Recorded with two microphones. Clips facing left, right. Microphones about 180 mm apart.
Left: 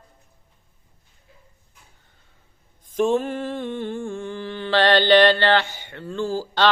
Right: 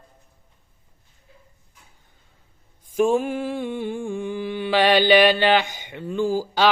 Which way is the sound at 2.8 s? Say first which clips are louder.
Right 1 dB; 10° right (ahead or behind).